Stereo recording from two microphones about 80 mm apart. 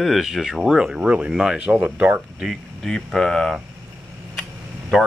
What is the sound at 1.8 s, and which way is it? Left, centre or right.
Speech, right.